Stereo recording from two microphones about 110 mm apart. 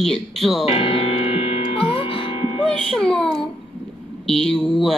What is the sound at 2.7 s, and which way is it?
Music, 5° left (ahead or behind).